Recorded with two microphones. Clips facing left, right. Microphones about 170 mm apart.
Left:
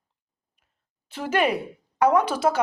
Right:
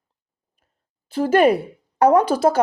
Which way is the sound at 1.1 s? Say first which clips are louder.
Right 8 dB; 40° right (ahead or behind).